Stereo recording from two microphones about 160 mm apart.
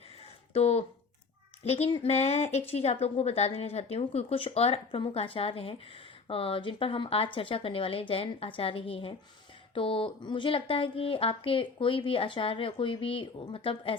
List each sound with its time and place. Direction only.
0.5 s speech: 40° left (ahead or behind)